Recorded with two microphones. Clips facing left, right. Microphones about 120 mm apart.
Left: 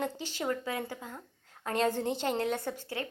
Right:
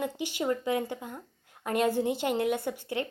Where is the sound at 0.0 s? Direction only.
15° right (ahead or behind).